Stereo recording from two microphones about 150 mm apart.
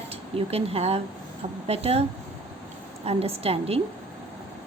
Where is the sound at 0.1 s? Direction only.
40° right (ahead or behind).